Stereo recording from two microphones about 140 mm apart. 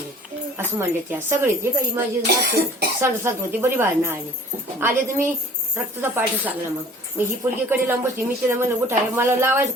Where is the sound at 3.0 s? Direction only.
15° right (ahead or behind).